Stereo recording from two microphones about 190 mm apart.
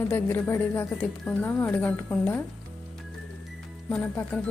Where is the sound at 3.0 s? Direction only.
Centre (ahead or behind).